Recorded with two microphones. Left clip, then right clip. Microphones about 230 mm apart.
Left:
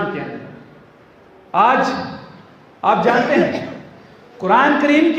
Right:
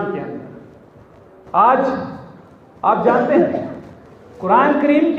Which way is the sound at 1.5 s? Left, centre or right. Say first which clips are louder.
Right 1 dB; left.